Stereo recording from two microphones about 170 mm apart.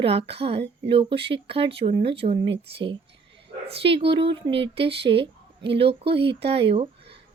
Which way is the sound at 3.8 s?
30° right (ahead or behind).